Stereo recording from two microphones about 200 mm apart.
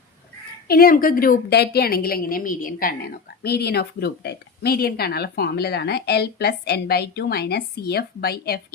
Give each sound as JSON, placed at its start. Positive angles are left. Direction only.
{"t": 0.7, "sound": "a woman's voice", "side_deg": 45}